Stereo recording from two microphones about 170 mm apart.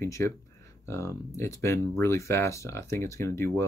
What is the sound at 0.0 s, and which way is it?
Speech, 15° left (ahead or behind).